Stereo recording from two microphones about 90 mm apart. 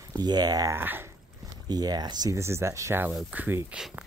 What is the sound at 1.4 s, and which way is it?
Speech, 45° right (ahead or behind).